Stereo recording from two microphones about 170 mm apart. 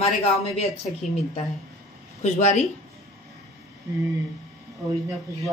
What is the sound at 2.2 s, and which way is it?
Speech, 40° left (ahead or behind).